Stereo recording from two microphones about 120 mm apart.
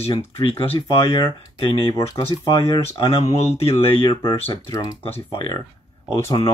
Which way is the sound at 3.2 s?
60° left (ahead or behind).